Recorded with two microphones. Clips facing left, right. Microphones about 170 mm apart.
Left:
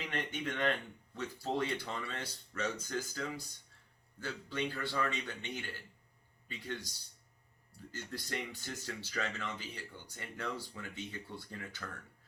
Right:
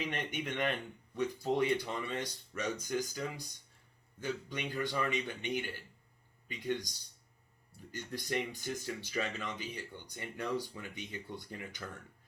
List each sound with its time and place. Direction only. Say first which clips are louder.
0.0 s speech: right 1 dB; 15° right (ahead or behind)